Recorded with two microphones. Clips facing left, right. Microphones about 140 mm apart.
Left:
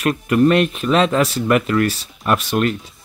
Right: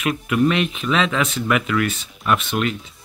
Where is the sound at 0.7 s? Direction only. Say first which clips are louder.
Left 5 dB; 45° left (ahead or behind).